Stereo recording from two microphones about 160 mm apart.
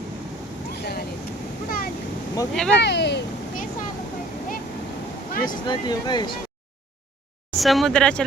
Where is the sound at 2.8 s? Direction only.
90° left.